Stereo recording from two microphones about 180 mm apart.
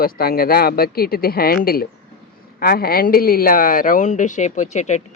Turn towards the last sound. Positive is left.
turn(degrees=40)  # may be behind; listen again after turning